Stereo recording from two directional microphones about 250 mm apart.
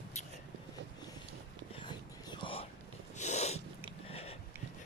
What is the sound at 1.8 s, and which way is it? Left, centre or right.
Whispering, centre.